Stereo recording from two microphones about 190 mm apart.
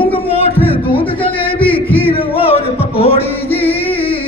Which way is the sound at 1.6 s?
10° left (ahead or behind).